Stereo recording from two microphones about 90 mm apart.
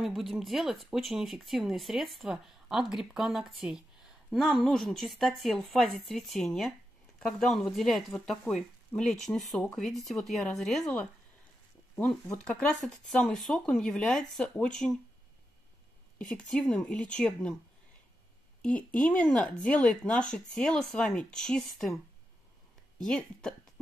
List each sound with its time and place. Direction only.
0.0 s speech: centre (ahead or behind)
11.9 s speech: 10° left (ahead or behind)
16.2 s speech: 15° left (ahead or behind)
18.6 s speech: 15° left (ahead or behind)
22.9 s speech: 5° left (ahead or behind)